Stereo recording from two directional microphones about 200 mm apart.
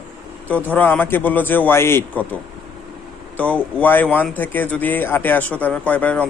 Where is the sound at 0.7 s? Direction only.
10° left (ahead or behind).